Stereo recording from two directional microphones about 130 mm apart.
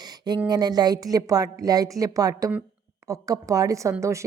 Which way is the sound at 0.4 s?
30° right (ahead or behind).